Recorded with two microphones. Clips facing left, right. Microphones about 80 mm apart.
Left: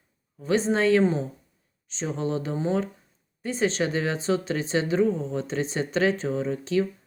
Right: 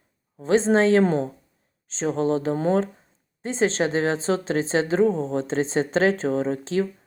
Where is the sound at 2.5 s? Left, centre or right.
Right.